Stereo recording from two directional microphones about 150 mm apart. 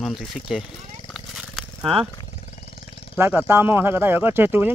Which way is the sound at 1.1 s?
Centre (ahead or behind).